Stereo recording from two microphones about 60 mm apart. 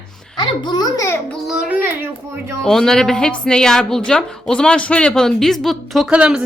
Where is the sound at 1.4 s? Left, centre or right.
Centre.